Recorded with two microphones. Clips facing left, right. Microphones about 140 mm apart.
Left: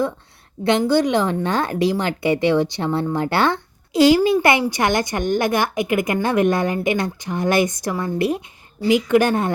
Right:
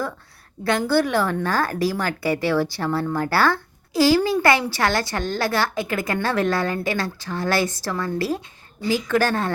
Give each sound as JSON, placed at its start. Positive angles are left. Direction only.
{"t": 0.6, "sound": "a woman's voice", "side_deg": 20}